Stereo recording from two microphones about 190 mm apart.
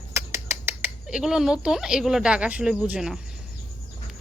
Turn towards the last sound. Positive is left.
turn(degrees=-5)  # may be behind; listen again after turning